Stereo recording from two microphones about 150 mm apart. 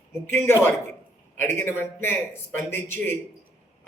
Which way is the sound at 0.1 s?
15° left (ahead or behind).